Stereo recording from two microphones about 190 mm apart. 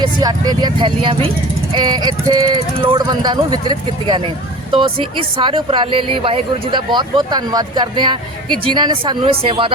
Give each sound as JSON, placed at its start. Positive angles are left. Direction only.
{"t": 0.0, "sound": "speech", "side_deg": -20}